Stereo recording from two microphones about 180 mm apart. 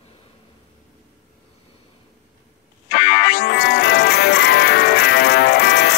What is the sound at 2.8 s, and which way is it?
Music, 65° left (ahead or behind).